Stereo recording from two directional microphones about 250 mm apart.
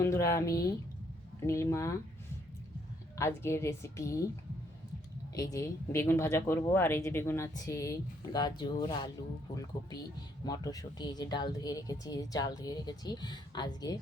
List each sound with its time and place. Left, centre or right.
0.0 s speech: centre
3.2 s speech: centre
5.3 s speech: centre
10.4 s speech: centre